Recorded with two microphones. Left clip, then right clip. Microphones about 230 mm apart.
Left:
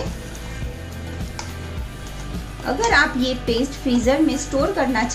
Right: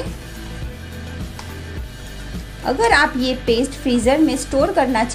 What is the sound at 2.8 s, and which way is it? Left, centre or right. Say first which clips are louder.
A woman's voice: right 2 dB; right.